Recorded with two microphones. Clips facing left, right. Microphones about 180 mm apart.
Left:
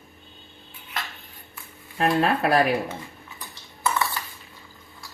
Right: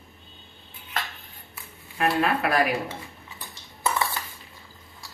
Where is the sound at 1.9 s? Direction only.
30° left (ahead or behind).